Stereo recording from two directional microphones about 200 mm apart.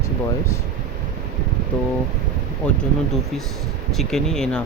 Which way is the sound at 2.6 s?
5° left (ahead or behind).